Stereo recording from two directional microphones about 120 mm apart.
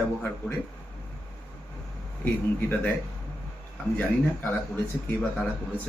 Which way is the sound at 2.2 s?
15° left (ahead or behind).